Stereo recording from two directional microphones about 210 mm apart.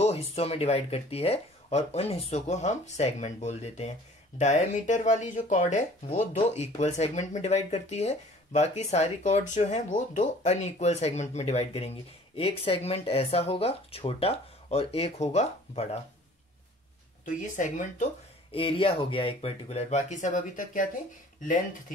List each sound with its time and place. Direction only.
0.0 s speech: 30° left (ahead or behind)
17.2 s speech: 35° left (ahead or behind)
18.5 s speech: 25° left (ahead or behind)